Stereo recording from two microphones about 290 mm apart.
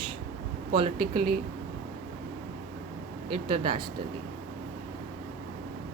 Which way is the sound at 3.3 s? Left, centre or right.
Centre.